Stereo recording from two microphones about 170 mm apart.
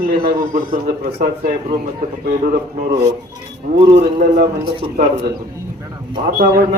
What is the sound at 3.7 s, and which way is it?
Speech, 50° right (ahead or behind).